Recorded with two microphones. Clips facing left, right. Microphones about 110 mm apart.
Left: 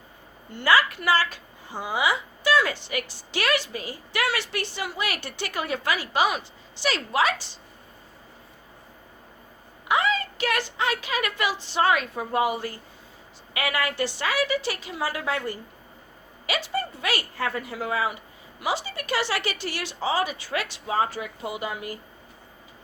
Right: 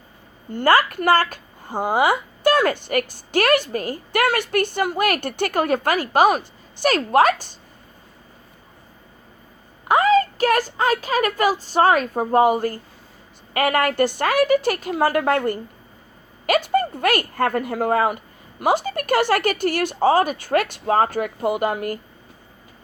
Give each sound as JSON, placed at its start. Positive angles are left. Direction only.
{"t": 0.5, "sound": "a woman's voice", "side_deg": -50}
{"t": 9.9, "sound": "a woman's voice", "side_deg": -45}